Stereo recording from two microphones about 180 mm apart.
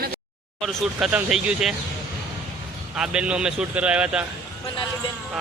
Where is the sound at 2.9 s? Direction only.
5° right (ahead or behind).